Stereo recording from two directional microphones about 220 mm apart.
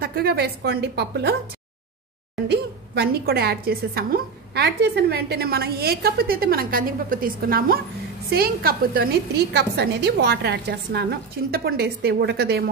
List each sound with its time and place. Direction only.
0.0 s a woman's voice: 45° right (ahead or behind)
2.4 s a woman's voice: 50° right (ahead or behind)